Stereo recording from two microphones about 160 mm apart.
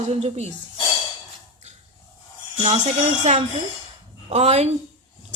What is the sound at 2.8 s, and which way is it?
Speech, 45° right (ahead or behind).